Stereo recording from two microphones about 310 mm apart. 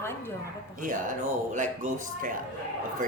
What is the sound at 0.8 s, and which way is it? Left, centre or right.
Speech, right.